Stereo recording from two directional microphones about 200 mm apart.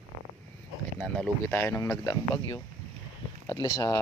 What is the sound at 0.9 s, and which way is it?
Speech, 5° left (ahead or behind).